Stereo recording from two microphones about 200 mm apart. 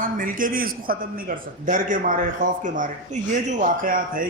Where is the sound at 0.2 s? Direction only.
45° right (ahead or behind).